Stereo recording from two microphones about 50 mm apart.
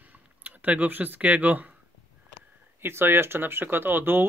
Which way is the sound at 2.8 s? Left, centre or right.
Right.